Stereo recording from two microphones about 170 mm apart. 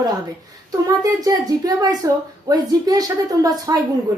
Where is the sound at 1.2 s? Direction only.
20° right (ahead or behind).